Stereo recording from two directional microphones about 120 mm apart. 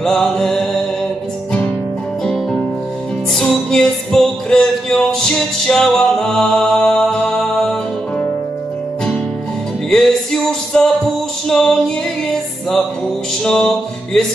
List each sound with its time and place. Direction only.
0.0 s music: 5° left (ahead or behind)
3.3 s music: 5° left (ahead or behind)
9.8 s music: 5° left (ahead or behind)
11.4 s female singing: 5° left (ahead or behind)
13.4 s music: 5° left (ahead or behind)